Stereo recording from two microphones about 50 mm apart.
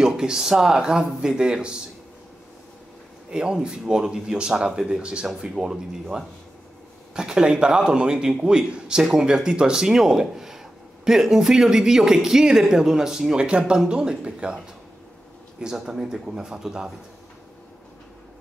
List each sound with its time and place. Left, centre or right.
0.0 s a man's voice: centre
3.3 s a man's voice: centre
15.6 s a man's voice: centre